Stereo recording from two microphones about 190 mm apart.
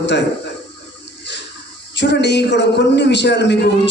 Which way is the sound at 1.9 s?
65° left (ahead or behind).